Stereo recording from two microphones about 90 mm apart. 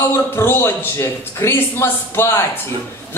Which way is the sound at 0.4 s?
25° left (ahead or behind).